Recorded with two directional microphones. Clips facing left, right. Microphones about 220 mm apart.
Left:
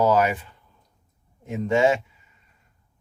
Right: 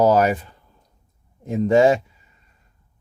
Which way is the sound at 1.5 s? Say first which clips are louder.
Right 5 dB; 35° right (ahead or behind).